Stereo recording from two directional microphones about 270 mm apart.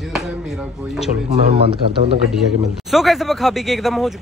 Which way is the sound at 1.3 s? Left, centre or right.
Right.